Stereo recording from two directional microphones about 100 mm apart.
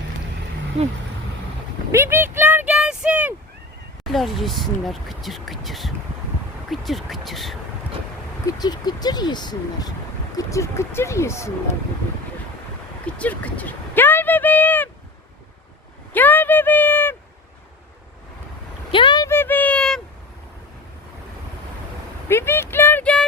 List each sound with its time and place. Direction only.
0.8 s speech: 90° right
1.9 s speech: 25° right (ahead or behind)
4.0 s speech: centre (ahead or behind)
8.5 s speech: 45° left (ahead or behind)
10.3 s speech: 30° left (ahead or behind)
13.1 s speech: 15° left (ahead or behind)
16.1 s a sound: 20° left (ahead or behind)
18.9 s vehicle: 55° left (ahead or behind)
19.3 s a sound: 20° left (ahead or behind)
22.3 s a sound: 25° left (ahead or behind)